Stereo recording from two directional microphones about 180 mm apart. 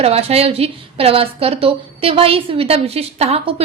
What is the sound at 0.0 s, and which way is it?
A woman's voice, 35° right (ahead or behind).